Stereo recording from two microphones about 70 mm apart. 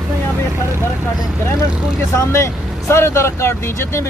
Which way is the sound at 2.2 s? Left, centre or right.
Left.